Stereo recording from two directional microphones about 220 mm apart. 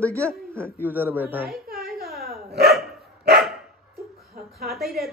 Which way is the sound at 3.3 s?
Centre (ahead or behind).